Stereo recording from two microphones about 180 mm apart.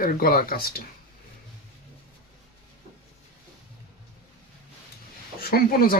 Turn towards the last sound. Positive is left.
turn(degrees=55)  # may be behind; listen again after turning